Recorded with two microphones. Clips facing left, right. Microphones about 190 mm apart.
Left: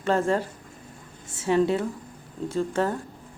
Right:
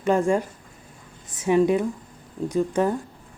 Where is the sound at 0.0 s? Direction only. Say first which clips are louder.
Right 3 dB; 15° right (ahead or behind).